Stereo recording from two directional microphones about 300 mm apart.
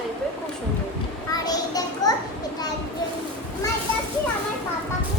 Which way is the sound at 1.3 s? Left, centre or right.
Centre.